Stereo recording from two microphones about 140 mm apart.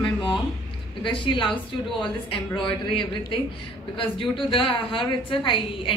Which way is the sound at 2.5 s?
35° left (ahead or behind).